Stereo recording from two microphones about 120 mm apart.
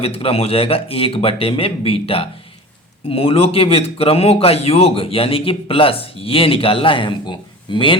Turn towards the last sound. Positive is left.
turn(degrees=45)  # may be behind; listen again after turning